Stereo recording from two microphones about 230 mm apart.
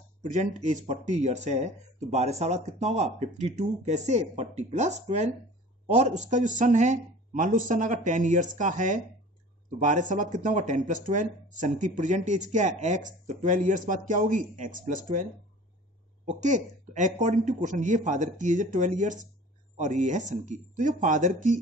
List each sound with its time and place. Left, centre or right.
0.2 s speech: right
16.3 s speech: right